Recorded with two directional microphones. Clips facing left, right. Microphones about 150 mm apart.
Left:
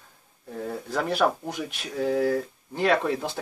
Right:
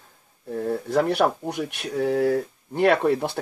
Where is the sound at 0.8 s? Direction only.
65° right (ahead or behind).